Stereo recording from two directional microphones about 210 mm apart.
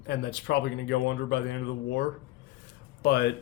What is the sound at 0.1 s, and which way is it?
A man's voice, 55° left (ahead or behind).